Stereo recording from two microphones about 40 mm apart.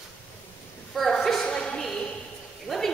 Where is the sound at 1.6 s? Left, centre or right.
Centre.